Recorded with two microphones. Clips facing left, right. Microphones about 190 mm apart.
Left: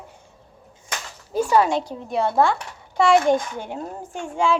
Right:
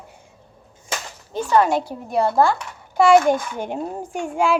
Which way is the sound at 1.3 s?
10° left (ahead or behind).